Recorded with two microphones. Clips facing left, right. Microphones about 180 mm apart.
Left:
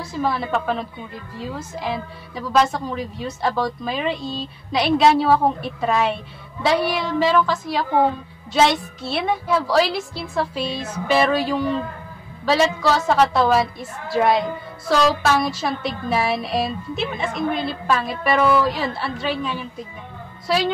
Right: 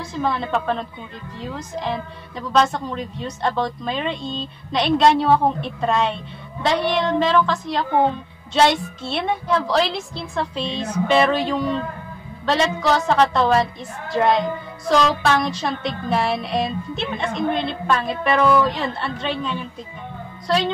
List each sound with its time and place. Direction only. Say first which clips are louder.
0.1 s child singing: even; 5° left (ahead or behind)
9.0 s child singing: left 1 dB; 5° left (ahead or behind)
12.9 s child singing: right 2 dB; 5° left (ahead or behind)